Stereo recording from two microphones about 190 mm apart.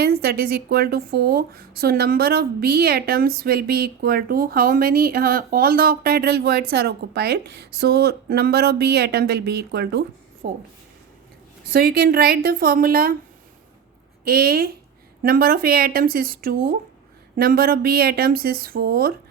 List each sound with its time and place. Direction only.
0.0 s a woman's voice: 55° right (ahead or behind)
11.7 s a woman's voice: 55° right (ahead or behind)
14.3 s a woman's voice: 55° right (ahead or behind)